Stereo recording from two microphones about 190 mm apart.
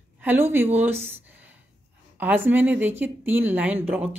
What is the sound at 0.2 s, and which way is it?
Speech, 10° right (ahead or behind).